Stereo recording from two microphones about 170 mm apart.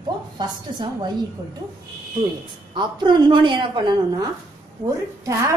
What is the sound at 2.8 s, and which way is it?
A woman's voice, 25° right (ahead or behind).